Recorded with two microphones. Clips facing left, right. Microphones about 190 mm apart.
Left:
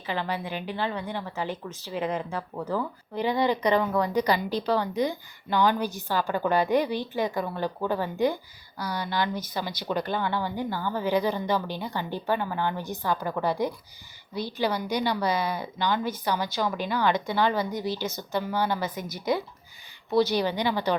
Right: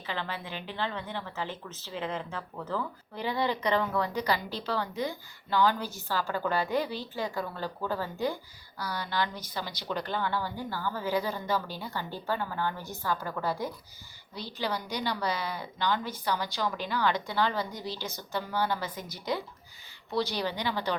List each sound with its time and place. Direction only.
0.0 s speech: 15° left (ahead or behind)